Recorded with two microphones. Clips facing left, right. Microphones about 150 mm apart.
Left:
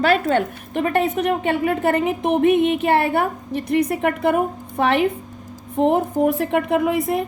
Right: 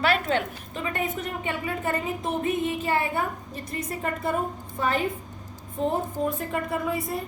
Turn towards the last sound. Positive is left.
turn(degrees=85)